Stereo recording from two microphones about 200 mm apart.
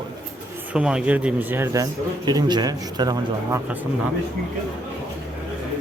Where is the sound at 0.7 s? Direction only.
5° right (ahead or behind).